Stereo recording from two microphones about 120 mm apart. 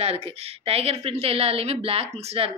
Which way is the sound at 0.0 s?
60° right (ahead or behind).